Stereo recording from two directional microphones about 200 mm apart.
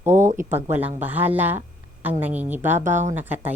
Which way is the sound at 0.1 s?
40° right (ahead or behind).